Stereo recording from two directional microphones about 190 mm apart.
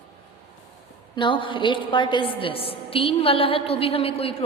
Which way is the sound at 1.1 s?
25° left (ahead or behind).